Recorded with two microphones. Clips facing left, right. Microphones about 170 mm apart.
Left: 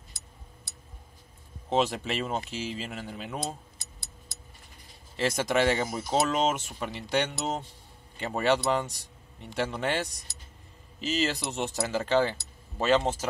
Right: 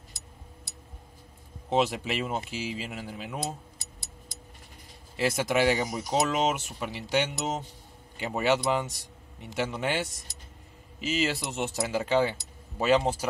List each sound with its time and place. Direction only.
1.7 s speech: 10° right (ahead or behind)
5.1 s speech: 5° right (ahead or behind)
5.9 s speech: 15° right (ahead or behind)
6.2 s speech: 5° right (ahead or behind)